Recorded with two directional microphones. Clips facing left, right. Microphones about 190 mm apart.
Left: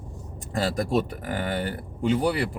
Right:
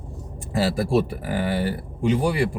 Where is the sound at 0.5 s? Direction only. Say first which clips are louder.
Right 3 dB; 5° right (ahead or behind).